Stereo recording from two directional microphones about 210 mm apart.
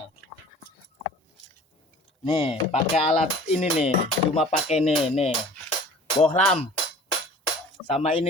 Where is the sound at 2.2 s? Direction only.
25° left (ahead or behind).